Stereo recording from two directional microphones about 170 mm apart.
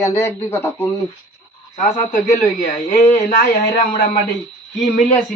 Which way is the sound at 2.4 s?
45° left (ahead or behind).